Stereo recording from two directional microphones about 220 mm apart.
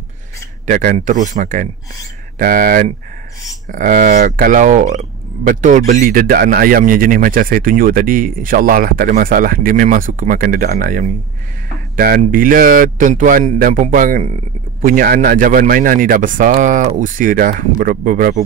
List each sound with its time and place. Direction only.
0.7 s speech: 35° right (ahead or behind)